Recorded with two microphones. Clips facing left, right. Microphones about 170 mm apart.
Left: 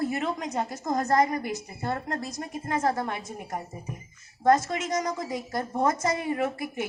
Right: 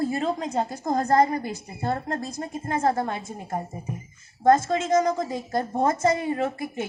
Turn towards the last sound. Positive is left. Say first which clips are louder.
# right 1 dB
turn(degrees=-30)  # may be behind; listen again after turning